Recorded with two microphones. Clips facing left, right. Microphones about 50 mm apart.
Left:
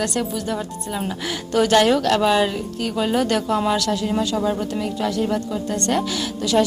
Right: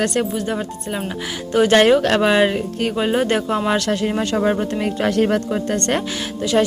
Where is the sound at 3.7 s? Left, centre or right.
Right.